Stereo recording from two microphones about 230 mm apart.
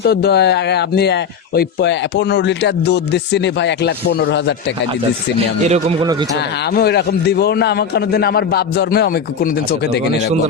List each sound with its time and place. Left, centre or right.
0.0 s speech: left
5.6 s speech: right
6.7 s speech: left